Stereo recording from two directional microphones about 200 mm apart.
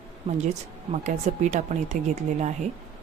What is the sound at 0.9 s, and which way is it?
Speech, 40° right (ahead or behind).